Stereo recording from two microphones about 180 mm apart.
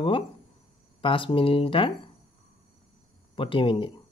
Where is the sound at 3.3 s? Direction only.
30° left (ahead or behind).